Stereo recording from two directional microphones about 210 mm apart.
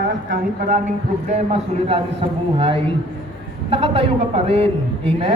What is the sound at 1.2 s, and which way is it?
A man's voice, 30° right (ahead or behind).